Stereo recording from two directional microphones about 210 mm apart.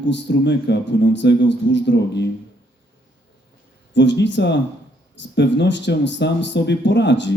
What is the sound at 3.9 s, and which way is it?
A man's voice, 55° left (ahead or behind).